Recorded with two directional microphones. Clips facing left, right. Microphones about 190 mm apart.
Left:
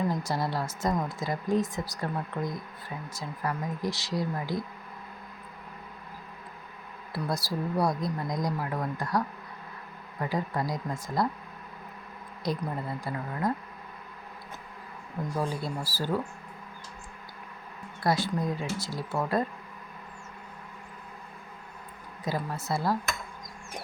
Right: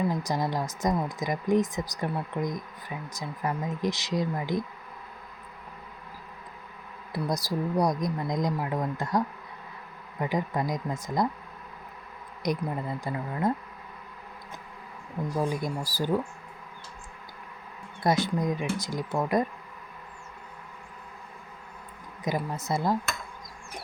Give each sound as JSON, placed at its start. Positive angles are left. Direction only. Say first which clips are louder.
{"t": 0.0, "sound": "a woman's voice", "louder": "right 1 dB", "side_deg": -15}
{"t": 7.1, "sound": "speech", "louder": "right 2 dB", "side_deg": -15}
{"t": 12.4, "sound": "a woman's voice", "louder": "right 2 dB", "side_deg": -15}
{"t": 15.4, "sound": "a woman's voice", "louder": "right 3 dB", "side_deg": -15}
{"t": 18.0, "sound": "a woman's voice", "louder": "right 2 dB", "side_deg": -20}
{"t": 22.2, "sound": "speech", "louder": "right 2 dB", "side_deg": -20}